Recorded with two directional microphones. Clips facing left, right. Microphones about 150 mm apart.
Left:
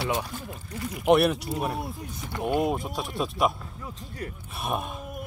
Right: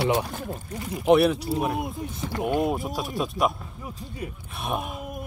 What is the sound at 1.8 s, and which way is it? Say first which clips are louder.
Speech: right 4 dB; 20° right (ahead or behind).